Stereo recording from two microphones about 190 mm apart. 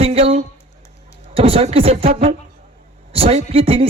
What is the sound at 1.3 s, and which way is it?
Speech, 30° right (ahead or behind).